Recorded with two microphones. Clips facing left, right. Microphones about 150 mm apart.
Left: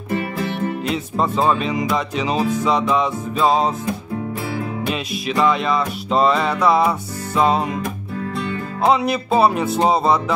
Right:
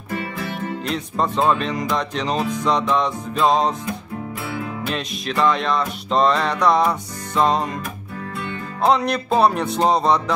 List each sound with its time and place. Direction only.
0.8 s music: 5° left (ahead or behind)
4.8 s music: 5° left (ahead or behind)
8.8 s music: 5° left (ahead or behind)